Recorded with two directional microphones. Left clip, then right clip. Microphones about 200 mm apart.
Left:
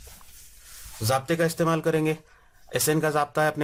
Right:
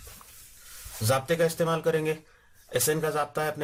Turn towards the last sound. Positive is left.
turn(degrees=30)  # may be behind; listen again after turning